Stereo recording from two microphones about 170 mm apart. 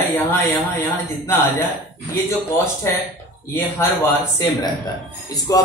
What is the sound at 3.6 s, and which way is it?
Speech, 15° left (ahead or behind).